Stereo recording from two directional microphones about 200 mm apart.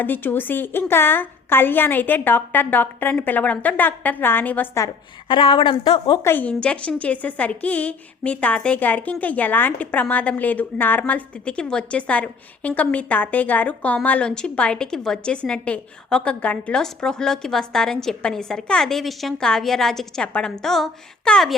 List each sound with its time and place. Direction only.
0.0 s a woman's voice: 10° left (ahead or behind)
5.3 s speech: 25° left (ahead or behind)
6.2 s a woman's voice: 10° left (ahead or behind)